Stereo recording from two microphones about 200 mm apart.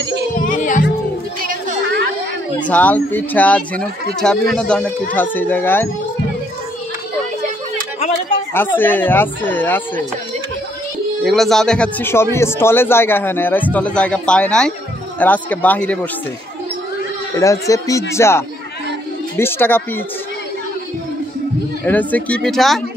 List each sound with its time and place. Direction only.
0.4 s music: 40° left (ahead or behind)
1.4 s music: 45° right (ahead or behind)
2.7 s a man's voice: 10° left (ahead or behind)
8.5 s a man's voice: 10° left (ahead or behind)
11.2 s a man's voice: centre (ahead or behind)
17.4 s a man's voice: 15° left (ahead or behind)
21.8 s speech: 10° left (ahead or behind)